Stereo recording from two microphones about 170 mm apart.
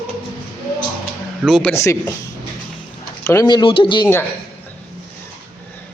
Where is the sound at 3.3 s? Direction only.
20° left (ahead or behind).